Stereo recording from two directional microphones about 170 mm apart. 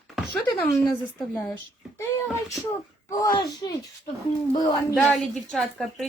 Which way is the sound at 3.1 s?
20° left (ahead or behind).